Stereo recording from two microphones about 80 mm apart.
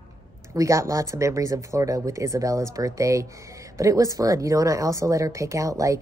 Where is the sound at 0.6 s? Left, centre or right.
Right.